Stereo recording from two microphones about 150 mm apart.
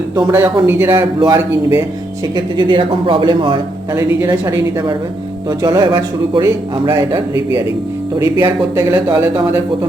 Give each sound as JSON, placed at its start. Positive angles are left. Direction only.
{"t": 0.3, "sound": "a man's voice", "side_deg": -15}
{"t": 0.9, "sound": "a man's voice", "side_deg": -30}
{"t": 3.9, "sound": "a man's voice", "side_deg": -20}